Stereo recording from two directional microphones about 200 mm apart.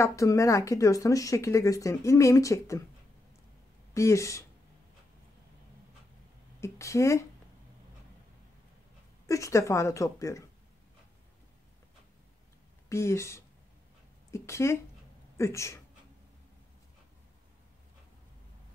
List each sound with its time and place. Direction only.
0.0 s speech: 15° left (ahead or behind)
3.9 s speech: 15° left (ahead or behind)
6.6 s speech: 15° left (ahead or behind)
9.3 s speech: 15° left (ahead or behind)
12.9 s speech: 15° left (ahead or behind)